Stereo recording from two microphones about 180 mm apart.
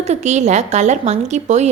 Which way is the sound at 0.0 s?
40° right (ahead or behind).